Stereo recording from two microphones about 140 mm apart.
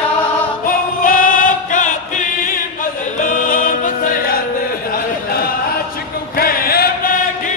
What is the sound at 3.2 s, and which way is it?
Music, 75° left (ahead or behind).